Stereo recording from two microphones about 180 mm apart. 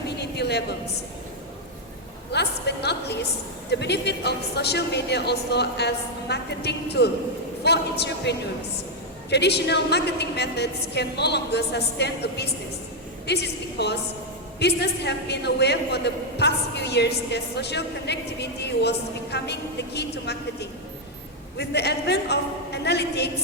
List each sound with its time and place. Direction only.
0.2 s a woman's voice: 65° left (ahead or behind)
2.3 s a man's voice: 70° left (ahead or behind)